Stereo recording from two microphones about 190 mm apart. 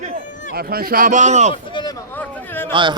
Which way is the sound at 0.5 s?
50° right (ahead or behind).